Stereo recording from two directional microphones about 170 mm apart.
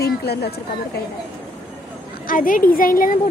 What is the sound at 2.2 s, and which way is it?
Speech, 55° left (ahead or behind).